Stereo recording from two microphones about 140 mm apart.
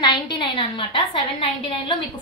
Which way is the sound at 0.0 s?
30° left (ahead or behind).